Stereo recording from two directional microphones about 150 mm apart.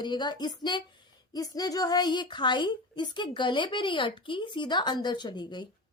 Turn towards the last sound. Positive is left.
turn(degrees=30)  # may be behind; listen again after turning